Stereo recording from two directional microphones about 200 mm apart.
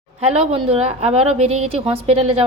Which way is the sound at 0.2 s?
30° right (ahead or behind).